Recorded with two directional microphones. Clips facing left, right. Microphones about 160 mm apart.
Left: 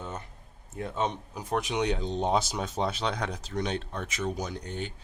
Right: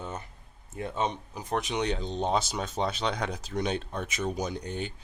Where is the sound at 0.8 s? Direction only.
Centre (ahead or behind).